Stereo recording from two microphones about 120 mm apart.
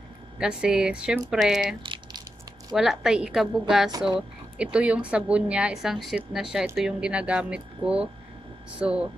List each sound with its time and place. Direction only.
0.4 s a woman's voice: 5° right (ahead or behind)
1.8 s a sound: 40° right (ahead or behind)
2.7 s a woman's voice: 5° right (ahead or behind)